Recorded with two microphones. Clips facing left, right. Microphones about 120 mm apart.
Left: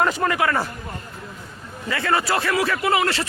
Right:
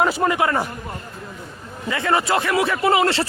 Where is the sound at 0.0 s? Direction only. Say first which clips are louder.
Right 2 dB; 10° right (ahead or behind).